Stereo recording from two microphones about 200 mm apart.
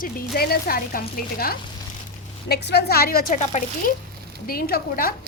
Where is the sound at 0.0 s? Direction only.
50° left (ahead or behind).